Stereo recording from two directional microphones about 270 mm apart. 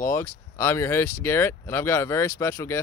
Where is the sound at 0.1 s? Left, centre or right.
Centre.